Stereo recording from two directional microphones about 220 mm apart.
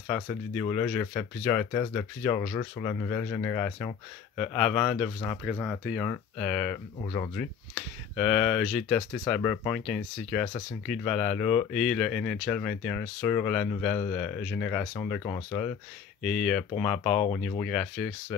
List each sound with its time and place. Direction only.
0.1 s speech: 5° left (ahead or behind)
7.1 s speech: 15° left (ahead or behind)
8.2 s speech: 5° left (ahead or behind)